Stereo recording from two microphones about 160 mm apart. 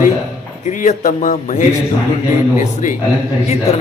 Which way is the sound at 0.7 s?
50° left (ahead or behind).